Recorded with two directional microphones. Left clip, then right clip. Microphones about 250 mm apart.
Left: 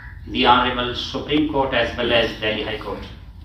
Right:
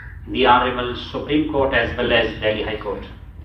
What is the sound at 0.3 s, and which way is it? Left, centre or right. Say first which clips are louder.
A man's voice: right 1 dB; left.